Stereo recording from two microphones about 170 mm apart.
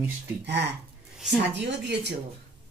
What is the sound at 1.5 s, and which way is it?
Speech, 90° right.